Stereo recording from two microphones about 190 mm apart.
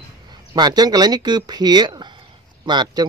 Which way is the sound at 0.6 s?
20° right (ahead or behind).